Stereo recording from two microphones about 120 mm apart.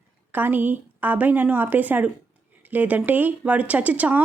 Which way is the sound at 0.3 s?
15° right (ahead or behind).